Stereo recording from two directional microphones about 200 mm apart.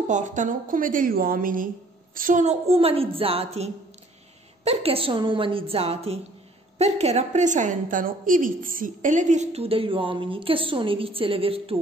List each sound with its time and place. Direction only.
0.1 s a woman's voice: 40° right (ahead or behind)